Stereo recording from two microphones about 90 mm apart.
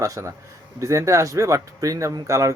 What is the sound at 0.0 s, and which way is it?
Speech, 35° right (ahead or behind).